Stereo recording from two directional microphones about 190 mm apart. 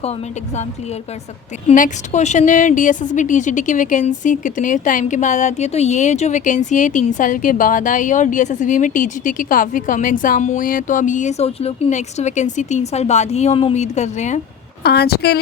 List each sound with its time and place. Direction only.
1.6 s a woman's voice: 40° left (ahead or behind)
14.8 s a woman's voice: 55° left (ahead or behind)